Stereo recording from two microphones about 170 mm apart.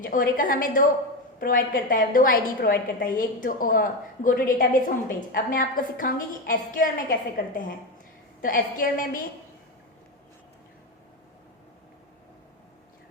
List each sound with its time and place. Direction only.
0.0 s a woman's voice: 55° left (ahead or behind)